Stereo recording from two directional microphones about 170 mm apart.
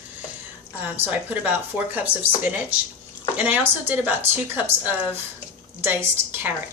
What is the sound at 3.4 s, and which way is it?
Speech, 10° right (ahead or behind).